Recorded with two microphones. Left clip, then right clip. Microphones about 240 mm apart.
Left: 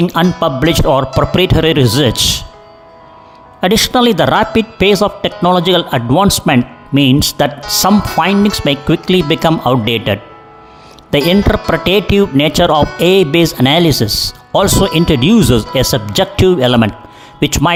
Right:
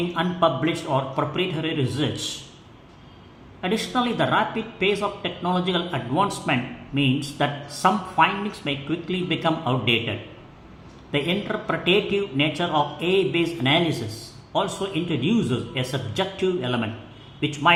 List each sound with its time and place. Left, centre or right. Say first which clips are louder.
0.1 s a woman's voice: left 8 dB; left
3.6 s a woman's voice: left 14 dB; left